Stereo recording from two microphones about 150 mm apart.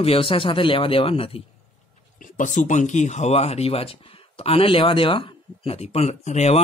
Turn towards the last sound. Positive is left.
turn(degrees=50)  # may be behind; listen again after turning